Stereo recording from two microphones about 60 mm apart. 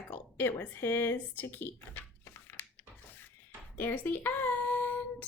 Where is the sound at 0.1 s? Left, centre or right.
Left.